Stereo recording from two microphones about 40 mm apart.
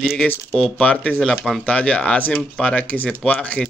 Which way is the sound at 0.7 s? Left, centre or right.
Left.